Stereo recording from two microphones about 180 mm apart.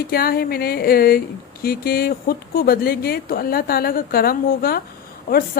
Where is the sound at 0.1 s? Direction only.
55° left (ahead or behind).